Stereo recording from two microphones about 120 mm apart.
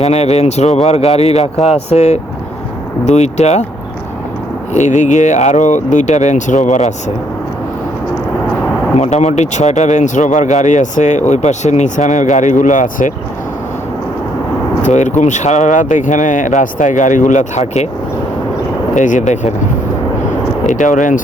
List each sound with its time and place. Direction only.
0.0 s speech: 60° left (ahead or behind)
4.7 s speech: 85° left
9.0 s speech: 70° left (ahead or behind); by 13.1 s 90° left
14.8 s speech: 85° left
18.9 s speech: 90° left
20.7 s speech: 90° left